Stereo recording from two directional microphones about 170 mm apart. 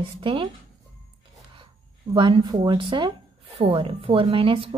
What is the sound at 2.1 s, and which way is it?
A woman's voice, 30° right (ahead or behind).